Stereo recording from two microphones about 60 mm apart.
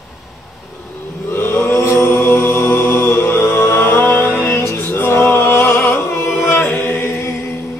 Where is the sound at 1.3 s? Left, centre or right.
Left.